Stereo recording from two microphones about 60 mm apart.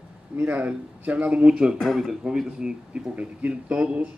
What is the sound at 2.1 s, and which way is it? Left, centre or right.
Speech, centre.